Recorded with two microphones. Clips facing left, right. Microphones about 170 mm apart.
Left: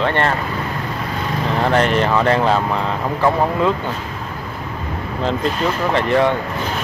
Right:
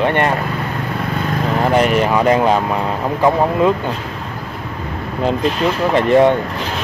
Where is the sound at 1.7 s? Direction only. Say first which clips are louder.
Right 2 dB; 10° right (ahead or behind).